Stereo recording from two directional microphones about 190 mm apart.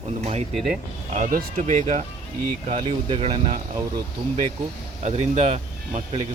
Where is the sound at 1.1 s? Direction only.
45° right (ahead or behind).